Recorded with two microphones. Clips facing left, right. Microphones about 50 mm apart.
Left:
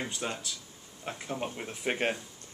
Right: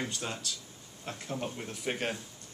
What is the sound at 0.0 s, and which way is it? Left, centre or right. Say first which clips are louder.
Speech: left 1 dB; centre.